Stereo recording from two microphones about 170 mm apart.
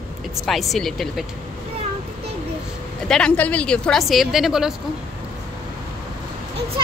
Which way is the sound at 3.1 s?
5° left (ahead or behind).